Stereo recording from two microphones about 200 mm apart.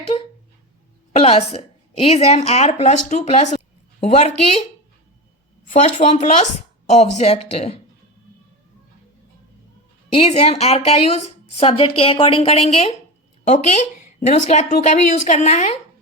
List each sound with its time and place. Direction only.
1.1 s a woman's voice: 30° left (ahead or behind)
5.7 s a woman's voice: 35° left (ahead or behind)
10.1 s a woman's voice: 30° left (ahead or behind)